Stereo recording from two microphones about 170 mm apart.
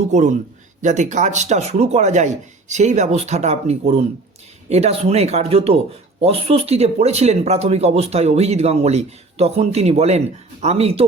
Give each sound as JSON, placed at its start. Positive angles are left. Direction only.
{"t": 0.1, "sound": "a man's voice", "side_deg": -45}